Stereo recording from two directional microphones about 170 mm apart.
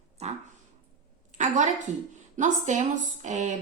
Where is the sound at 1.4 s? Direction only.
45° right (ahead or behind).